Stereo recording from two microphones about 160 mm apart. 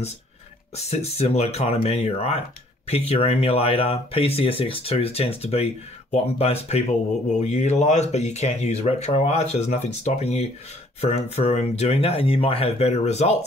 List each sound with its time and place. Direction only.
0.7 s speech: 40° left (ahead or behind)